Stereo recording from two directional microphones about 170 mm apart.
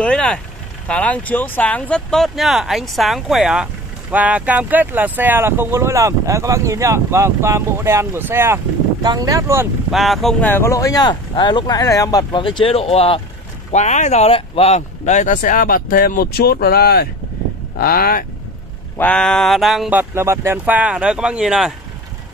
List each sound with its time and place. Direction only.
0.0 s speech: 5° left (ahead or behind); by 9.7 s 15° right (ahead or behind)
9.8 s speech: centre (ahead or behind)
10.5 s speech: 15° left (ahead or behind); by 18.2 s 60° left (ahead or behind)
18.9 s speech: 5° left (ahead or behind)
20.0 s speech: 15° right (ahead or behind)